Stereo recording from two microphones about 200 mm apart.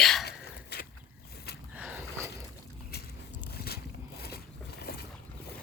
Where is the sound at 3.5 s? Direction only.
50° left (ahead or behind).